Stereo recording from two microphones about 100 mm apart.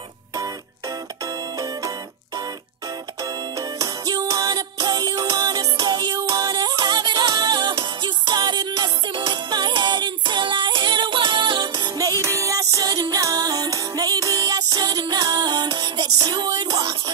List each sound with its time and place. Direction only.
0.4 s music: 35° right (ahead or behind)
12.2 s music: 30° right (ahead or behind)